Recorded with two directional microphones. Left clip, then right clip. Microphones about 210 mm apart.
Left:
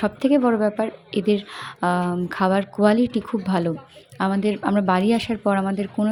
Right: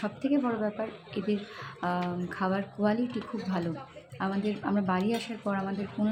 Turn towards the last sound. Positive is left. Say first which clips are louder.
# left 9 dB
turn(degrees=40)  # may be behind; listen again after turning